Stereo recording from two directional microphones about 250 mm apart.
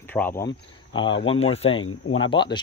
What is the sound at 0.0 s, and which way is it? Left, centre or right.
Speech, centre.